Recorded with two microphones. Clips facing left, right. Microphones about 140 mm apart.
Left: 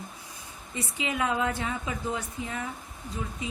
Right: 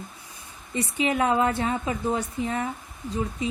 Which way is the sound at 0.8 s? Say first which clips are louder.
Right 6 dB; 65° right (ahead or behind).